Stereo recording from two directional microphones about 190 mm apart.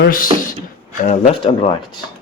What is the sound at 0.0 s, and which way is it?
Speech, 45° left (ahead or behind).